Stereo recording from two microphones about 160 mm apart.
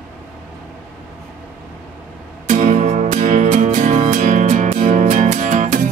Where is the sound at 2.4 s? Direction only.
50° right (ahead or behind).